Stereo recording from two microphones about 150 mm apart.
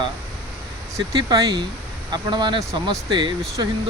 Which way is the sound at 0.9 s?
25° right (ahead or behind).